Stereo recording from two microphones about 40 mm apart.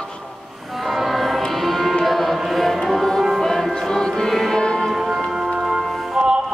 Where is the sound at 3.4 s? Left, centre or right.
Centre.